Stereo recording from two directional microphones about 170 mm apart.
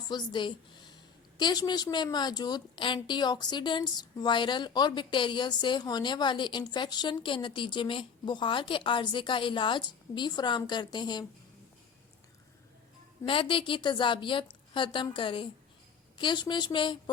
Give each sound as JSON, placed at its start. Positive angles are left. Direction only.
{"t": 0.1, "sound": "a woman's voice", "side_deg": 25}
{"t": 13.2, "sound": "a woman's voice", "side_deg": 30}